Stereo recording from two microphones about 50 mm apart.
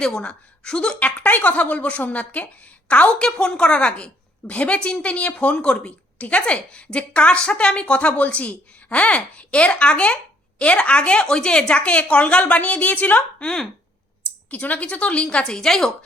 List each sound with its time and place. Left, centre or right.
0.0 s a woman's voice: centre
0.9 s a woman's voice: left
13.4 s a woman's voice: centre
14.5 s a woman's voice: left; by 15.9 s centre